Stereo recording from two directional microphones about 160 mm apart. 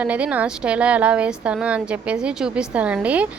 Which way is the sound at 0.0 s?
10° right (ahead or behind).